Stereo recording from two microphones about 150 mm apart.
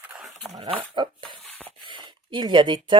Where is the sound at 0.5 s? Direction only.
35° right (ahead or behind).